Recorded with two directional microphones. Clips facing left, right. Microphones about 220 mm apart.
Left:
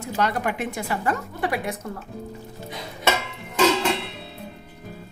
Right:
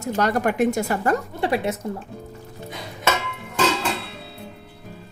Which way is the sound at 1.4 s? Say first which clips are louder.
Right 4 dB; 25° right (ahead or behind).